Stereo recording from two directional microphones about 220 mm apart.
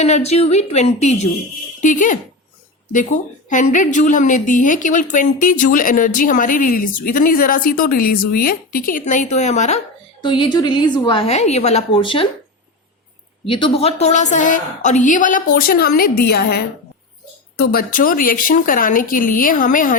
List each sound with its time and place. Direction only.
0.0 s a woman's voice: 30° left (ahead or behind)
10.2 s a woman's voice: 20° left (ahead or behind)
13.4 s a woman's voice: 25° left (ahead or behind)